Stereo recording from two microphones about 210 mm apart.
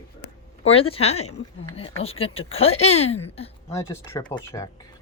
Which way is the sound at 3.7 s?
15° left (ahead or behind).